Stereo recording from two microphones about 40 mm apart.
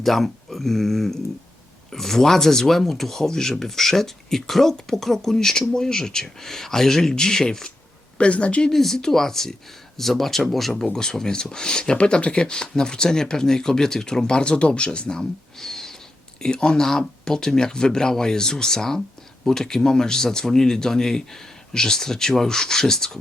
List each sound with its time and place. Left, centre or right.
0.0 s speech: centre
8.2 s speech: left
8.7 s speech: centre
16.4 s speech: left